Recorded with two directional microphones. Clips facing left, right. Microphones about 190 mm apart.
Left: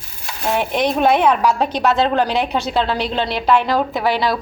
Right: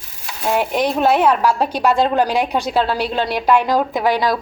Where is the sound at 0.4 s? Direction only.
5° right (ahead or behind).